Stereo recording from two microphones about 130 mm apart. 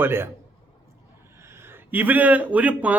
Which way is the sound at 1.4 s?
20° right (ahead or behind).